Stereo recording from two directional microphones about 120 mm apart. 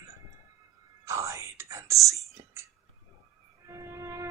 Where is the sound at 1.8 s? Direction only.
25° right (ahead or behind).